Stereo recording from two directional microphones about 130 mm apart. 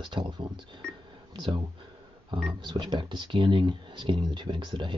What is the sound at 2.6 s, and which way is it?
Speech, 35° right (ahead or behind).